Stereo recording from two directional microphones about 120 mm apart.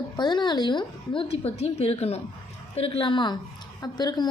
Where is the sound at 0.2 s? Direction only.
40° left (ahead or behind).